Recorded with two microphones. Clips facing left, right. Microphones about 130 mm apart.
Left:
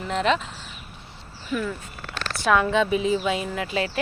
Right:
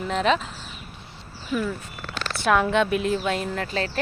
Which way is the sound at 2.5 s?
Centre (ahead or behind).